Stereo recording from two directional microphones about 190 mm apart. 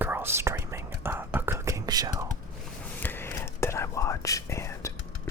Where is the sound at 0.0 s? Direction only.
10° right (ahead or behind).